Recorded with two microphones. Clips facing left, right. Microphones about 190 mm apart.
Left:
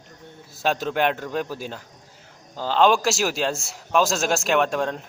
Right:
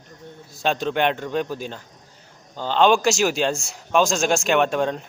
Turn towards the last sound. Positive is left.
turn(degrees=0)  # may be behind; listen again after turning